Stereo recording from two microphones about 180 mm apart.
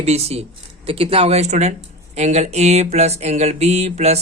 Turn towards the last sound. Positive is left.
turn(degrees=-35)  # may be behind; listen again after turning